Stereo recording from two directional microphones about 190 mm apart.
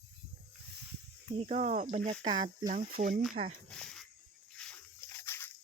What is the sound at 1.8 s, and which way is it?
Speech, 30° right (ahead or behind).